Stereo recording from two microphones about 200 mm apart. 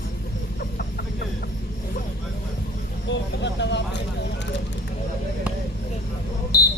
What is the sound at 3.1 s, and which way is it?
Vehicle, 60° left (ahead or behind).